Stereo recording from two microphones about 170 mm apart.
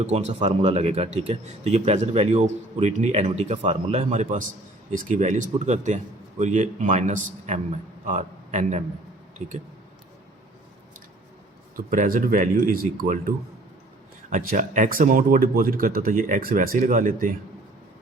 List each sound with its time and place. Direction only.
0.0 s speech: 40° right (ahead or behind)
11.9 s speech: 55° right (ahead or behind)